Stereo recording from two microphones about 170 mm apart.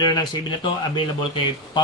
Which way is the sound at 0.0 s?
25° left (ahead or behind).